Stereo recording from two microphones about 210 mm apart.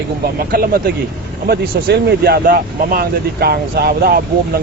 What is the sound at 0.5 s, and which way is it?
Speech, 45° right (ahead or behind).